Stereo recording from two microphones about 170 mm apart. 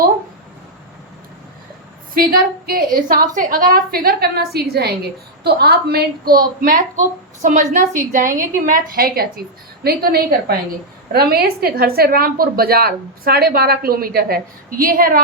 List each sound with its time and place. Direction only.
2.1 s a woman's voice: 60° right (ahead or behind)